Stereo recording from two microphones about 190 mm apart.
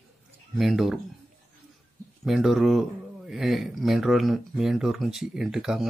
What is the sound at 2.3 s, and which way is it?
Speech, centre (ahead or behind).